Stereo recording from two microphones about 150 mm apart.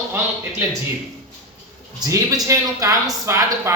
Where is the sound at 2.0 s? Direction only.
20° right (ahead or behind).